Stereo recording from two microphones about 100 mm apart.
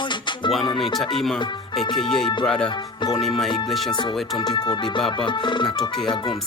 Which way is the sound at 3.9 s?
50° left (ahead or behind).